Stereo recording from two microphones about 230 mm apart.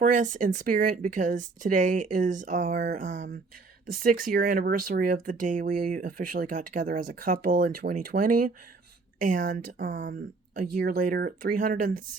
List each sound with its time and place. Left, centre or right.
0.0 s speech: right